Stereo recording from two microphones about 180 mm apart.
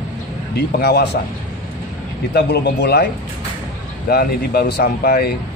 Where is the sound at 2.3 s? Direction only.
65° left (ahead or behind).